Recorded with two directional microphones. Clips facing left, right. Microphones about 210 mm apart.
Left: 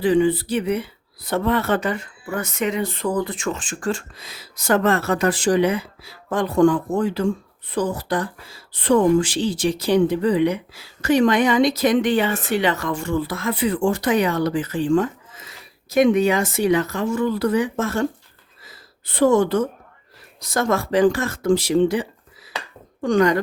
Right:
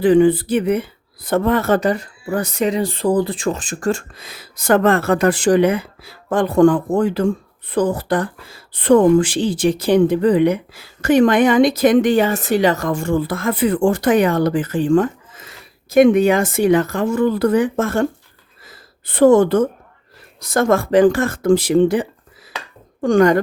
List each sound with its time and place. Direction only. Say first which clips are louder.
0.0 s speech: right 5 dB; 50° right (ahead or behind)
18.7 s a sound: right 2 dB; 50° right (ahead or behind)
20.4 s speech: right 5 dB; 55° right (ahead or behind)